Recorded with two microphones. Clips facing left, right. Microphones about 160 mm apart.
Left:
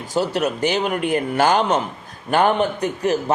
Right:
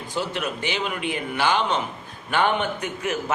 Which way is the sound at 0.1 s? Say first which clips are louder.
Left 7 dB; 40° left (ahead or behind).